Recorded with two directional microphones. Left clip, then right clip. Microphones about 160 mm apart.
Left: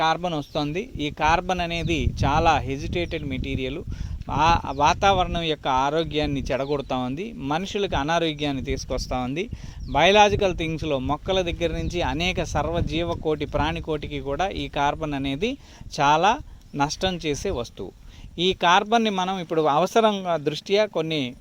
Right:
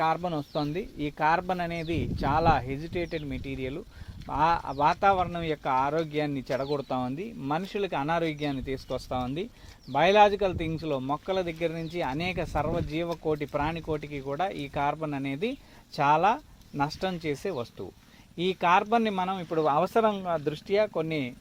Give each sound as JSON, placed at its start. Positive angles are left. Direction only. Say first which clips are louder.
{"t": 0.0, "sound": "a man's voice", "louder": "left 4 dB", "side_deg": 40}